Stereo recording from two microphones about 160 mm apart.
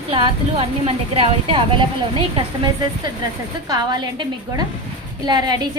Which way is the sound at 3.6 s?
25° right (ahead or behind).